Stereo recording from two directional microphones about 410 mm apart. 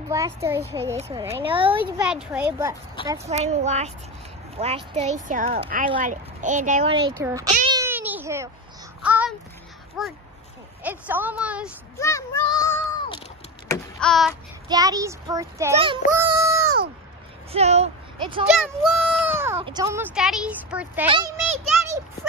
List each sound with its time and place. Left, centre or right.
0.1 s speech: centre
3.1 s speech: centre
7.5 s a sound: centre
10.0 s a woman's voice: centre
12.0 s a sound: centre
13.7 s a child's voice: centre
16.2 s a sound: centre
17.5 s speech: centre
18.6 s speech: centre